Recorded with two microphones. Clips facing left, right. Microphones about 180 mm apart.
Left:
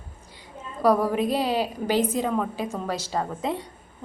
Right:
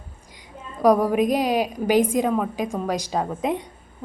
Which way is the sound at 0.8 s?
15° right (ahead or behind).